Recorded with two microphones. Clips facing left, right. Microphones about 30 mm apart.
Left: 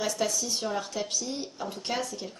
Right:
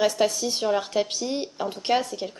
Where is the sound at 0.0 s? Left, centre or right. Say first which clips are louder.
Right 7 dB; right.